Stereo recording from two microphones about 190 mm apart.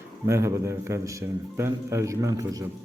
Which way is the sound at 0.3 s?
15° right (ahead or behind).